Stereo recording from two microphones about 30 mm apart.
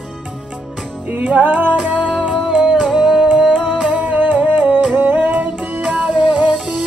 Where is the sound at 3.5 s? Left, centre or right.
Right.